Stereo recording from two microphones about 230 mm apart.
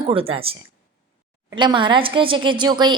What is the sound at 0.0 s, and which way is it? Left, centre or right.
A woman's voice, right.